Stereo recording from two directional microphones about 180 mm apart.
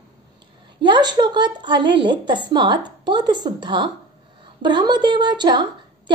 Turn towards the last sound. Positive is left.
turn(degrees=-25)  # may be behind; listen again after turning